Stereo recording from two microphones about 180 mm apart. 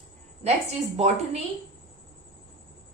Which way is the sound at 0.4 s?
35° right (ahead or behind).